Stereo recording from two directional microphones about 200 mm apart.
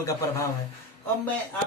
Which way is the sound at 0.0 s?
15° left (ahead or behind).